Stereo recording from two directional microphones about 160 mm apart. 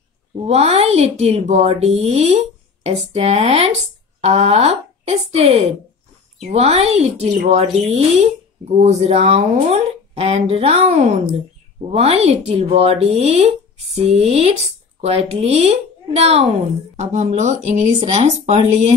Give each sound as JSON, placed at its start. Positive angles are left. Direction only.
{"t": 0.5, "sound": "speech", "side_deg": -40}